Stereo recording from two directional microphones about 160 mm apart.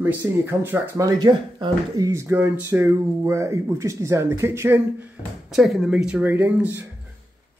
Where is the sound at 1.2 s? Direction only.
25° right (ahead or behind).